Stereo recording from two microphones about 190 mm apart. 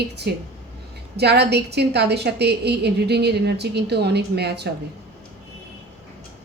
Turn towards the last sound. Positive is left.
turn(degrees=-60)  # may be behind; listen again after turning